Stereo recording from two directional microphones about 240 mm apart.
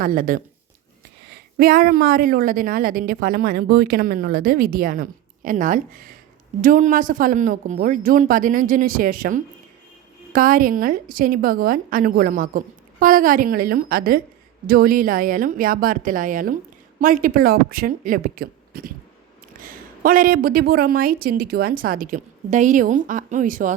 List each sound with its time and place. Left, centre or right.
0.0 s a woman's voice: right
1.5 s a woman's voice: right